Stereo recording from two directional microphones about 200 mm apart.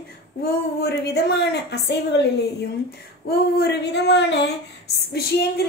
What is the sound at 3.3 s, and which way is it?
A woman's voice, 55° left (ahead or behind).